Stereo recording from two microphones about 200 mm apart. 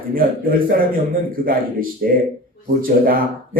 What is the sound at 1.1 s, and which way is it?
Speech, 45° right (ahead or behind).